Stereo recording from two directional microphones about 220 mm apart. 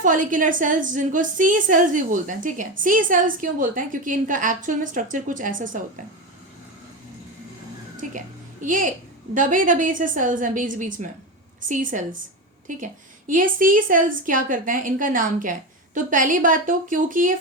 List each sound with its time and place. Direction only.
0.0 s a woman's voice: 35° right (ahead or behind)
8.6 s a woman's voice: 35° right (ahead or behind)